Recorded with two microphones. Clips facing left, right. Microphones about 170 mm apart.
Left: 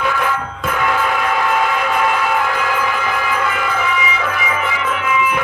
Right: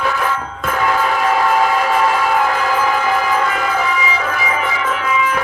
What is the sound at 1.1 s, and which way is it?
Train, 40° right (ahead or behind).